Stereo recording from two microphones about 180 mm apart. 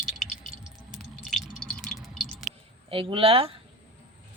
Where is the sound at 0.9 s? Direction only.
Centre (ahead or behind).